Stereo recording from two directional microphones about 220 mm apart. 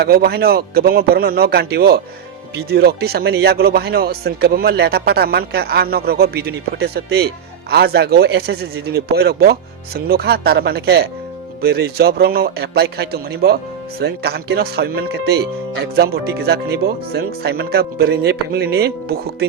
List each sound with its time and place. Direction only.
0.0 s speech: 45° right (ahead or behind)